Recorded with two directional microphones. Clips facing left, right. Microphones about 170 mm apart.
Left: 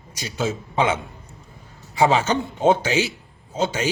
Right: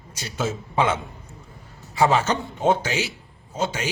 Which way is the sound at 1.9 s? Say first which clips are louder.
Left 1 dB; 20° left (ahead or behind).